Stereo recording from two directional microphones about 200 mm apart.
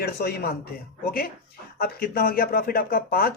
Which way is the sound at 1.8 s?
50° left (ahead or behind).